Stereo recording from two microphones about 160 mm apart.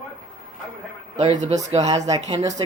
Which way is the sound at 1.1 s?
40° right (ahead or behind).